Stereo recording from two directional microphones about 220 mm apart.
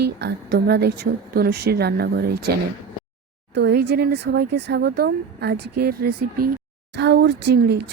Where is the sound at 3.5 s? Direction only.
50° right (ahead or behind).